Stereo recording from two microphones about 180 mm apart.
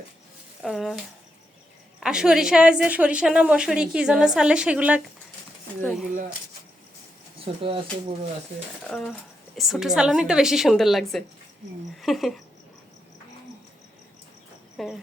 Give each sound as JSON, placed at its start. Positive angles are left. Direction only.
{"t": 0.6, "sound": "a woman's voice", "side_deg": 0}
{"t": 2.0, "sound": "a woman's voice", "side_deg": -5}
{"t": 7.4, "sound": "speech", "side_deg": -30}
{"t": 8.8, "sound": "a woman's voice", "side_deg": 5}
{"t": 14.8, "sound": "a woman's voice", "side_deg": 0}